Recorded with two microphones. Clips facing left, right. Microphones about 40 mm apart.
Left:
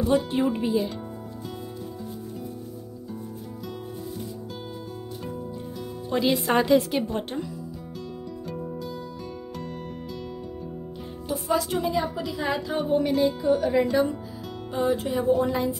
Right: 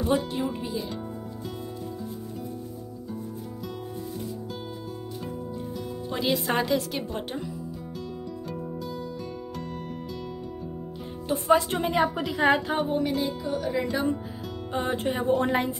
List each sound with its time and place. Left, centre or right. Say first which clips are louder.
0.3 s speech: left 6 dB; left
6.0 s speech: left 4 dB; centre
11.2 s a woman's voice: right 4 dB; right
12.7 s speech: left 3 dB; centre
14.7 s speech: left 4 dB; right
15.0 s a woman's voice: left 1 dB; right